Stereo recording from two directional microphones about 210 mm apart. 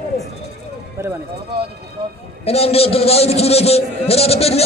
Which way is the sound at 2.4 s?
30° left (ahead or behind).